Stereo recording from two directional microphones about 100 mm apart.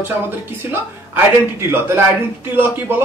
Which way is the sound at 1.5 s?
20° right (ahead or behind).